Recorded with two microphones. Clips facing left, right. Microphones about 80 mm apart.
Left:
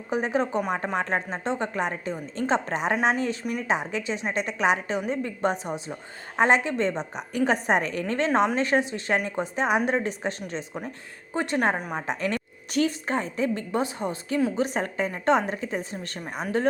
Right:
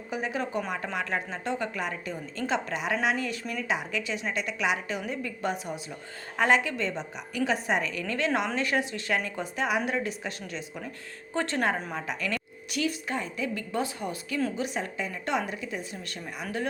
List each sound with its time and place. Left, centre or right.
0.1 s a woman's voice: left
11.3 s a woman's voice: centre
11.9 s a woman's voice: left
14.5 s a woman's voice: left